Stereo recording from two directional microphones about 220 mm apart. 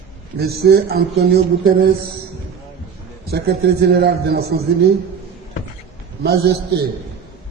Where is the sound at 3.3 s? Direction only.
45° right (ahead or behind).